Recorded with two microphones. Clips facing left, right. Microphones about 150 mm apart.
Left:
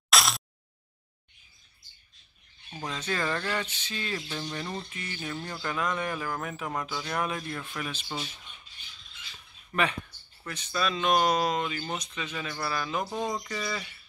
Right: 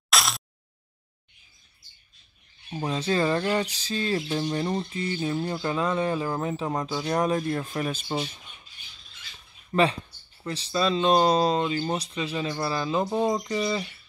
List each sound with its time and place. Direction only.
0.1 s a sound: centre (ahead or behind)
2.8 s bird: 30° right (ahead or behind)
9.7 s speech: 30° right (ahead or behind)